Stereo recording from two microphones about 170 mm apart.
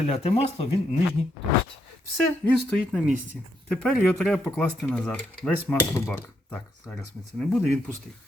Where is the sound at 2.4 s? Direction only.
5° left (ahead or behind).